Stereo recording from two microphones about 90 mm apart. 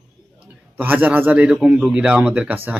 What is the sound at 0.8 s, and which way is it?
A man's voice, 20° right (ahead or behind).